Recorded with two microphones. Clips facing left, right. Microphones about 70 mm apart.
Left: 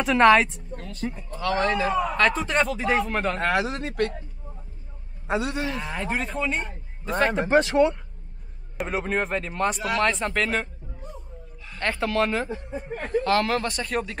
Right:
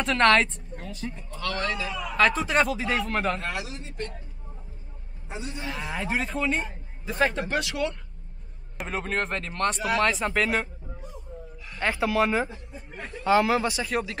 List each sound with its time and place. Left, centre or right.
0.0 s a man's voice: centre
0.7 s sheep: centre
1.6 s a man's voice: left
2.1 s a man's voice: centre
3.3 s speech: left
3.8 s speech: left
5.3 s speech: left
5.6 s a man's voice: centre
7.4 s speech: left
8.7 s a man's voice: centre
12.8 s speech: left
13.2 s speech: centre